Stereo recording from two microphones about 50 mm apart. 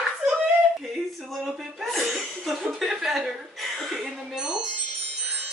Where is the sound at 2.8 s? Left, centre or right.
Centre.